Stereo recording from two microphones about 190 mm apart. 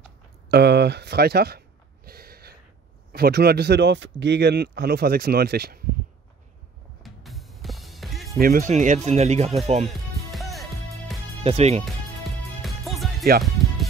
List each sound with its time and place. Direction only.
0.5 s speech: 60° right (ahead or behind)
2.0 s a sound: 55° right (ahead or behind)
3.1 s speech: 55° right (ahead or behind)
7.0 s music: centre (ahead or behind)
8.4 s speech: 50° right (ahead or behind)
9.8 s music: centre (ahead or behind)
11.4 s speech: 35° right (ahead or behind)
12.6 s music: centre (ahead or behind)